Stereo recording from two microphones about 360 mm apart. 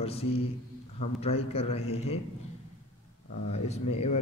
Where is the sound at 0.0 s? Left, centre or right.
Centre.